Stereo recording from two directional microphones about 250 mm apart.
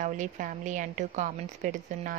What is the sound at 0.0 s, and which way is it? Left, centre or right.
A woman's voice, right.